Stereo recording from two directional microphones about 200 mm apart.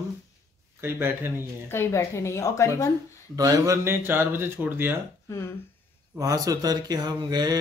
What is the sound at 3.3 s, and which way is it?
Speech, 15° right (ahead or behind).